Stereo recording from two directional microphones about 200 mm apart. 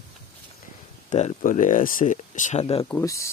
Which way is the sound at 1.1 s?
35° left (ahead or behind).